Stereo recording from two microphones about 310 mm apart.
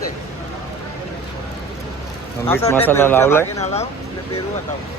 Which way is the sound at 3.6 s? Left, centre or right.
Centre.